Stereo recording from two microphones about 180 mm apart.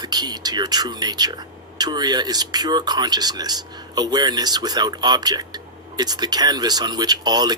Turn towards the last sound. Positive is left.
turn(degrees=-20)  # may be behind; listen again after turning